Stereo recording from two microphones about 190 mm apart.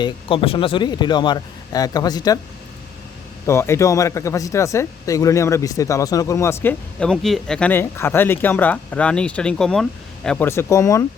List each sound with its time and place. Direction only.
0.0 s speech: 30° left (ahead or behind)
3.4 s speech: 15° left (ahead or behind)